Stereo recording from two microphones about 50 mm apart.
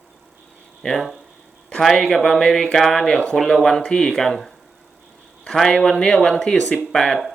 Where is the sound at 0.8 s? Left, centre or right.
Centre.